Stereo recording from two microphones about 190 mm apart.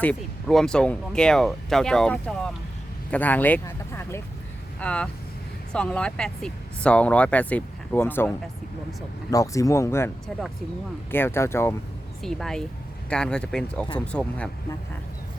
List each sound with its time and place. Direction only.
0.0 s speech: 5° left (ahead or behind)
9.3 s speech: 15° left (ahead or behind)
11.1 s speech: 10° left (ahead or behind)
12.2 s speech: centre (ahead or behind)